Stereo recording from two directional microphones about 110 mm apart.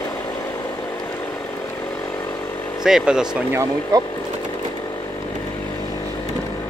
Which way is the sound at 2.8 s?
5° right (ahead or behind).